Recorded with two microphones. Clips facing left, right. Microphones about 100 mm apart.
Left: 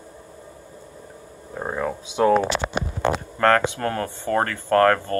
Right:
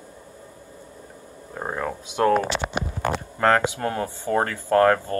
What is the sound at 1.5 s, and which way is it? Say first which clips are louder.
Speech: left 2 dB; centre (ahead or behind).